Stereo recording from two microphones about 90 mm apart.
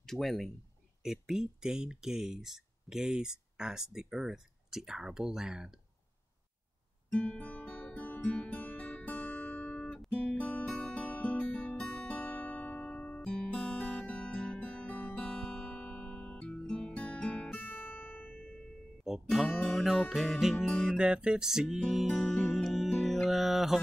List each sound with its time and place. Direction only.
0.0 s speech: centre (ahead or behind)
7.1 s music: 15° left (ahead or behind)
9.9 s guitar: 5° left (ahead or behind)
10.4 s guitar: 15° left (ahead or behind)
19.0 s music: centre (ahead or behind)